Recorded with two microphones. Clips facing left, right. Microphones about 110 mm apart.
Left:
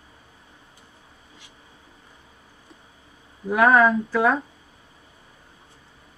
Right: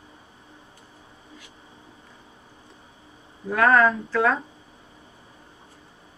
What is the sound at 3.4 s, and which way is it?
Speech, 15° left (ahead or behind).